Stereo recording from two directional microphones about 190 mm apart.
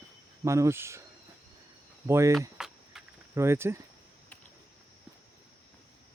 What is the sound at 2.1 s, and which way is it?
Speech, 15° right (ahead or behind).